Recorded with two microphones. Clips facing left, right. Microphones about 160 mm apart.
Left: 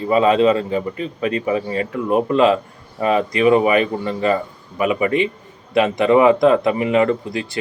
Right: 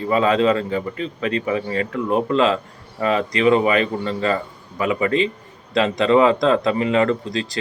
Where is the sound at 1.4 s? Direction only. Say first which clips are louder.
Left 2 dB; 25° left (ahead or behind).